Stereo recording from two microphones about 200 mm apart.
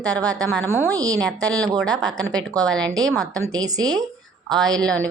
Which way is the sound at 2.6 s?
5° left (ahead or behind).